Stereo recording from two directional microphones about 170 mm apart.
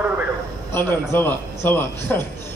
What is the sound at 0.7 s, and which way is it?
A man's voice, 10° left (ahead or behind).